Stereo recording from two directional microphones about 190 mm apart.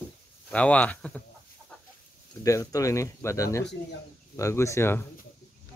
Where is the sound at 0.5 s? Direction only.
5° left (ahead or behind).